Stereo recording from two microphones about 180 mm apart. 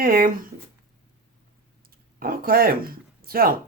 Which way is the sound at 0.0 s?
50° right (ahead or behind).